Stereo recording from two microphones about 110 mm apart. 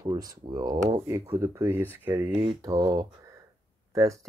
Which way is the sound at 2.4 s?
35° right (ahead or behind).